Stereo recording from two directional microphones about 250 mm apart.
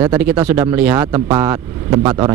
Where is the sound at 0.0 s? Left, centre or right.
Centre.